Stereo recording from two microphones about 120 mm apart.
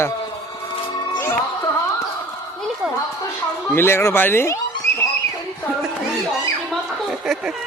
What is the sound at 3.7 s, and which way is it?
Speech, 20° left (ahead or behind).